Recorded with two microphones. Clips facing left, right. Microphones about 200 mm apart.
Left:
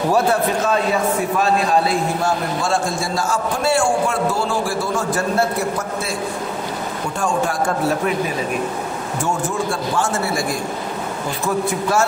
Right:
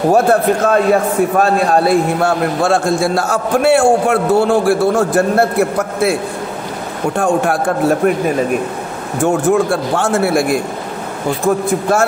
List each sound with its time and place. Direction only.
0.1 s a man's voice: 55° right (ahead or behind)
7.2 s a man's voice: 60° right (ahead or behind)
9.2 s a man's voice: 60° right (ahead or behind)